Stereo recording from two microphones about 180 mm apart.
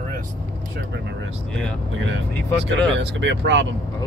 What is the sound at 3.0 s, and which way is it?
Speech, 75° right (ahead or behind).